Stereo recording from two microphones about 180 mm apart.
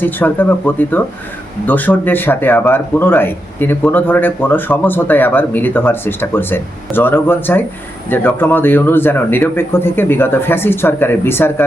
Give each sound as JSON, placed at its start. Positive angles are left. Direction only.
{"t": 0.0, "sound": "speech", "side_deg": 10}